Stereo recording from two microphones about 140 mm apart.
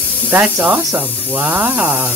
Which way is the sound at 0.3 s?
10° right (ahead or behind).